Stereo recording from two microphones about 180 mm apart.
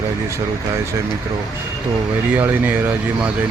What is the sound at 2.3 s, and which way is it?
Speech, 10° right (ahead or behind).